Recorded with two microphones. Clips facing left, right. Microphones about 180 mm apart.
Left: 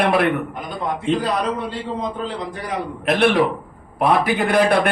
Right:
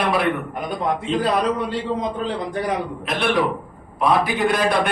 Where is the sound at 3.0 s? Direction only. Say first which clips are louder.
Left 5 dB; 60° left (ahead or behind).